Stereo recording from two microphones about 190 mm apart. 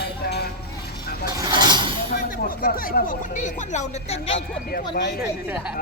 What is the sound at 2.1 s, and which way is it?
Speech, 50° left (ahead or behind).